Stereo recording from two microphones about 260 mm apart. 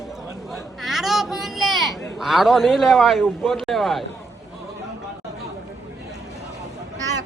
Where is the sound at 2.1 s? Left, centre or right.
Centre.